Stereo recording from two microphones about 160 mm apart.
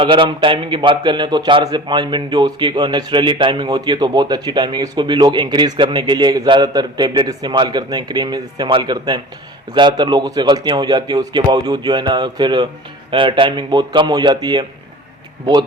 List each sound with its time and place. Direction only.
0.0 s a man's voice: 30° right (ahead or behind)